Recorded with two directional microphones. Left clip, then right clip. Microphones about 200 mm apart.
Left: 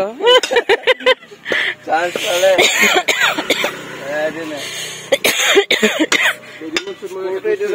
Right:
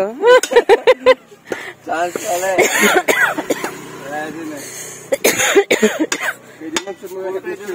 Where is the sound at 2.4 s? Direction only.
10° right (ahead or behind).